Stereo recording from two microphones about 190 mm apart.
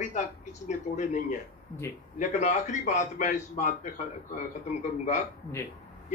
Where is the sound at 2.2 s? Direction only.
40° left (ahead or behind).